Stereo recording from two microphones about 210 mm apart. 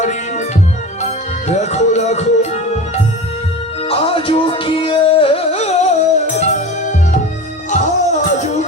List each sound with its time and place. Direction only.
0.0 s music: 35° left (ahead or behind)